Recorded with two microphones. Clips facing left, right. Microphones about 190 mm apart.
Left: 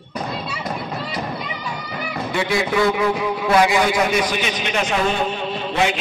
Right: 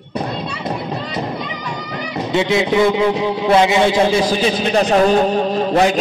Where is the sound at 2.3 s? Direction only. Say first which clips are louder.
Right 5 dB; 20° right (ahead or behind); by 5.9 s 40° right (ahead or behind).